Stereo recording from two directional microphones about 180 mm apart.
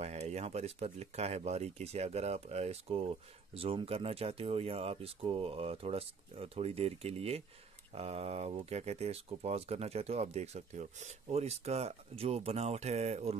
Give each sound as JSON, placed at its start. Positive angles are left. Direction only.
{"t": 0.0, "sound": "speech", "side_deg": -35}